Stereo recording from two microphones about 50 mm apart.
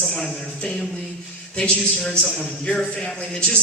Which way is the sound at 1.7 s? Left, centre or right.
Left.